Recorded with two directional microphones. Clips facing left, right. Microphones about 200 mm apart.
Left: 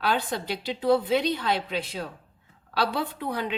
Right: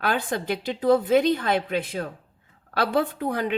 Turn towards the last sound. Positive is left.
turn(degrees=-45)  # may be behind; listen again after turning